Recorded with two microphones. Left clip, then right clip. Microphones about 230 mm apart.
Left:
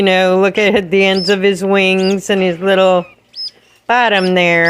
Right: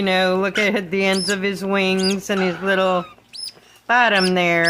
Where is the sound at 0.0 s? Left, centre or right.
Left.